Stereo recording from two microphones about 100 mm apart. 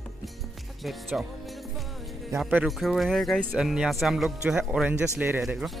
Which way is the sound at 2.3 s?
35° right (ahead or behind).